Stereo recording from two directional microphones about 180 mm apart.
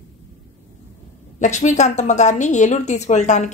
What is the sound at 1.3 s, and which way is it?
A woman's voice, 40° left (ahead or behind).